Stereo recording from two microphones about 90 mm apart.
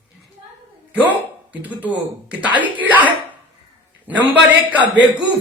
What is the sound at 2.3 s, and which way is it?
Speech, 15° right (ahead or behind).